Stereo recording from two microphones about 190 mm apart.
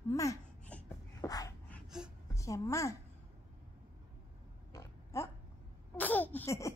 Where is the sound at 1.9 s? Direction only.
5° right (ahead or behind).